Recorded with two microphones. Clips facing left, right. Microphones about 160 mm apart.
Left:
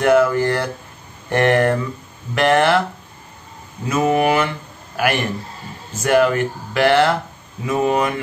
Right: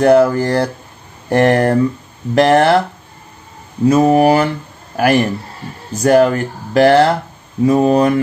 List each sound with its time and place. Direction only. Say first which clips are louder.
0.0 s speech: right 4 dB; 35° right (ahead or behind)
3.8 s speech: right 7 dB; 35° right (ahead or behind)